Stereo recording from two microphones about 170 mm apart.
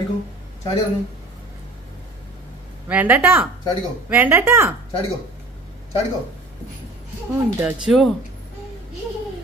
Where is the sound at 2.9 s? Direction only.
10° right (ahead or behind).